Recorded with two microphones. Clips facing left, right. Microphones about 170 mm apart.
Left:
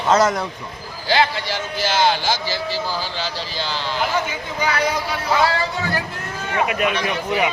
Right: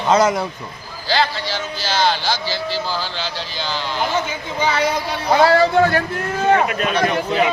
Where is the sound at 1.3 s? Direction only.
55° left (ahead or behind).